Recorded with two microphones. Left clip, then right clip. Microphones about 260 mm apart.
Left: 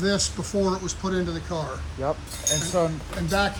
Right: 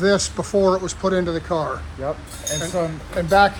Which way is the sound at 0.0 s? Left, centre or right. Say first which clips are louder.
Right 7 dB; centre.